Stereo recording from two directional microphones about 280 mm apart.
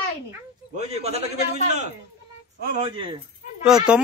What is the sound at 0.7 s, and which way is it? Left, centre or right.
Speech, right.